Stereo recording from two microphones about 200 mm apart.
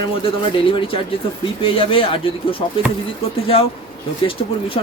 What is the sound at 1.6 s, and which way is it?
Speech, 25° left (ahead or behind).